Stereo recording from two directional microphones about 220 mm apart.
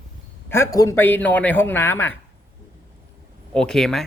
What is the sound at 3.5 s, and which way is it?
Speech, 5° left (ahead or behind).